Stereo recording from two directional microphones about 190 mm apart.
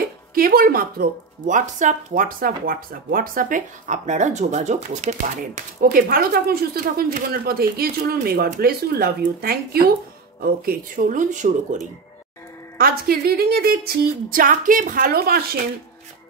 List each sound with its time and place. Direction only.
0.3 s speech: 50° right (ahead or behind)
12.7 s speech: 55° right (ahead or behind)